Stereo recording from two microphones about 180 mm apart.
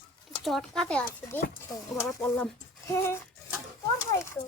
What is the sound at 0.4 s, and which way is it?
Speech, centre (ahead or behind).